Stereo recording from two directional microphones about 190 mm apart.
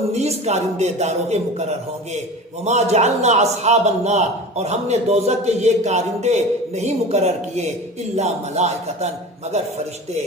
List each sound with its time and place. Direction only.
0.1 s a man's voice: 35° right (ahead or behind)